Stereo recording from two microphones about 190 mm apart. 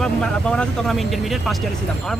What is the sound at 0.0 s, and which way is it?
Speech, 5° left (ahead or behind).